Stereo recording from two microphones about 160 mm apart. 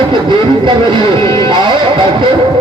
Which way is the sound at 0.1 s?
30° right (ahead or behind).